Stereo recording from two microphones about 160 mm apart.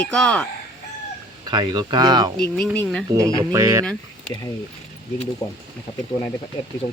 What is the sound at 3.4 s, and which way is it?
Speech, 20° right (ahead or behind).